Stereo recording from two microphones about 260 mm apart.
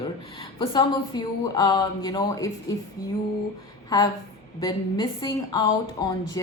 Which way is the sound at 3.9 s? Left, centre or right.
Centre.